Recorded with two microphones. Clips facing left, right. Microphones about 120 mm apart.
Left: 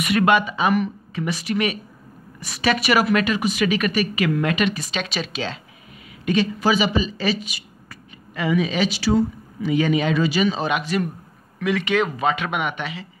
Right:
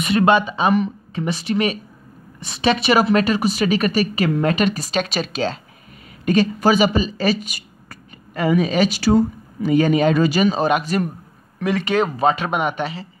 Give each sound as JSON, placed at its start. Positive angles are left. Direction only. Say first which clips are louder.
{"t": 0.0, "sound": "speech", "louder": "right 2 dB", "side_deg": -30}